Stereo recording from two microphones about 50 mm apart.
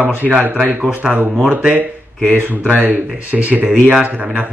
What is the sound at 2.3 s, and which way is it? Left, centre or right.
Speech, right.